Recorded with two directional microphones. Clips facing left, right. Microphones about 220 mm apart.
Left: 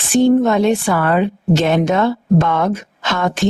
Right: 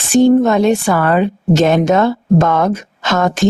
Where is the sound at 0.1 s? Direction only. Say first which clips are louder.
Right 3 dB; 45° right (ahead or behind).